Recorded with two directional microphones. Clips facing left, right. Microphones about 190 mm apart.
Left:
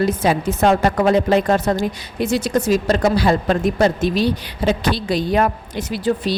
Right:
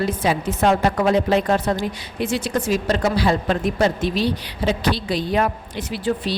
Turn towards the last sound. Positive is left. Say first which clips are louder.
# left 3 dB
turn(degrees=40)  # may be behind; listen again after turning